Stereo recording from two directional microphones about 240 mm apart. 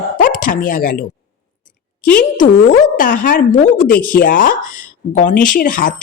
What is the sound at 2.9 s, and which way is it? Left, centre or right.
A man's voice, left.